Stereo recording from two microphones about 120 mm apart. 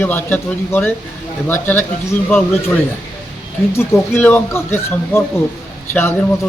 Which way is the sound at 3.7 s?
20° left (ahead or behind).